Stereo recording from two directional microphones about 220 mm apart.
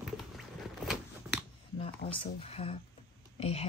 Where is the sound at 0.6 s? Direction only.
Centre (ahead or behind).